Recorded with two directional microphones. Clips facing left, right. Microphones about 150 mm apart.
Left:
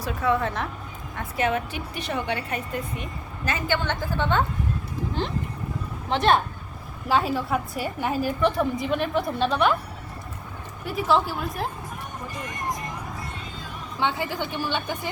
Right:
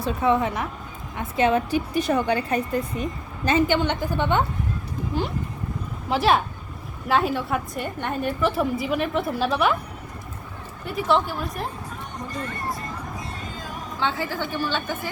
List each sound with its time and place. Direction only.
0.0 s a woman's voice: 20° right (ahead or behind)
1.4 s a woman's voice: 30° right (ahead or behind)
3.5 s a woman's voice: 15° right (ahead or behind)
10.8 s a woman's voice: centre (ahead or behind)
12.3 s speech: 15° left (ahead or behind)
13.4 s vehicle: 45° right (ahead or behind)
14.0 s a woman's voice: 15° left (ahead or behind)